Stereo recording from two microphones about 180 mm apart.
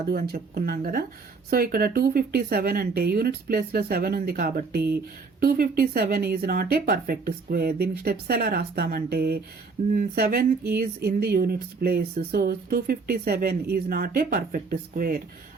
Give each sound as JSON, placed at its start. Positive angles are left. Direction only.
{"t": 0.1, "sound": "speech", "side_deg": -55}